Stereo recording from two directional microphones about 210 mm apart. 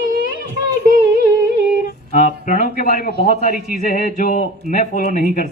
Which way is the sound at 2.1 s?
40° left (ahead or behind).